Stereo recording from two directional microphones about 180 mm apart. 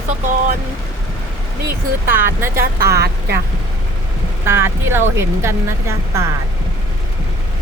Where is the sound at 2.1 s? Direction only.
10° right (ahead or behind).